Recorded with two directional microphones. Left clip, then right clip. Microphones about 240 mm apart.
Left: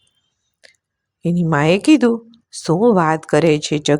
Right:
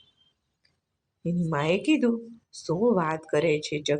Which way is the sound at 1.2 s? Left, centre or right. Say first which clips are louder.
Left 11 dB; left.